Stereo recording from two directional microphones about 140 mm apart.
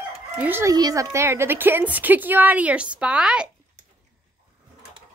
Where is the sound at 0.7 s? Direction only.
25° right (ahead or behind); by 3.4 s 5° right (ahead or behind).